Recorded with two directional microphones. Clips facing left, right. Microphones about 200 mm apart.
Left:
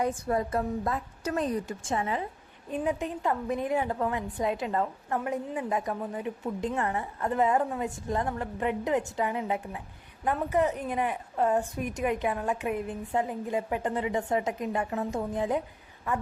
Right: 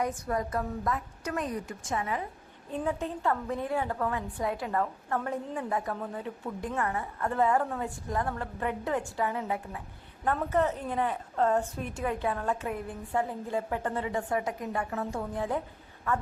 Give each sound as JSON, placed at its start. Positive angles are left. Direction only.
{"t": 0.0, "sound": "a woman's voice", "side_deg": 25}
{"t": 2.6, "sound": "a woman's voice", "side_deg": 15}